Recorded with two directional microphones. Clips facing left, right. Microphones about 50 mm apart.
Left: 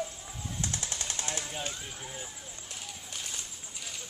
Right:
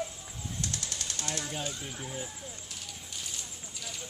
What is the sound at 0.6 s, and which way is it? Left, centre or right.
Jackhammer, left.